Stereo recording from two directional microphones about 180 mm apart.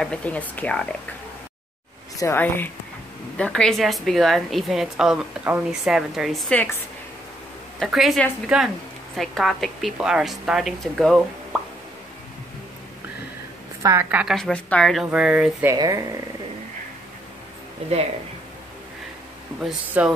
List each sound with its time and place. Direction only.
0.0 s speech: 5° left (ahead or behind)
2.1 s a woman's voice: 15° left (ahead or behind); by 6.3 s centre (ahead or behind)
6.5 s speech: 10° left (ahead or behind)
7.8 s a woman's voice: centre (ahead or behind)
13.8 s a woman's voice: 15° right (ahead or behind)
14.2 s a woman's voice: centre (ahead or behind)
15.7 s speech: 20° right (ahead or behind)
19.6 s a woman's voice: 5° right (ahead or behind)